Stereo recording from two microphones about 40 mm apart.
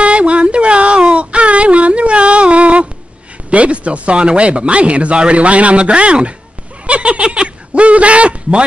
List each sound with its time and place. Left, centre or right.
0.0 s a sound: right
3.4 s speech: right
6.9 s snicker: right